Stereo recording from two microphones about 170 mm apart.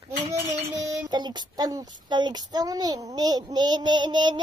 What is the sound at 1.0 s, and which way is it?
Child singing, 25° right (ahead or behind).